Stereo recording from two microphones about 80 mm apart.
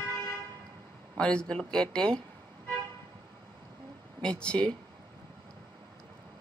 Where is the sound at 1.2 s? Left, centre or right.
Centre.